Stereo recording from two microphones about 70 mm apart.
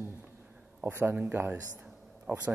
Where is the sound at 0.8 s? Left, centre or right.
Right.